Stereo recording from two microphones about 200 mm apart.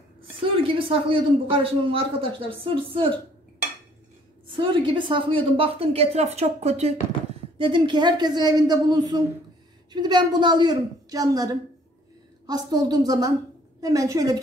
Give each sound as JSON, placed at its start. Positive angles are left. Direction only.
{"t": 0.4, "sound": "a man's voice", "side_deg": -25}
{"t": 4.6, "sound": "a man's voice", "side_deg": -25}